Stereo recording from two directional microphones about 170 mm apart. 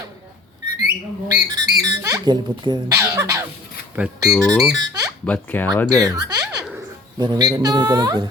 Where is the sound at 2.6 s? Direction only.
25° right (ahead or behind).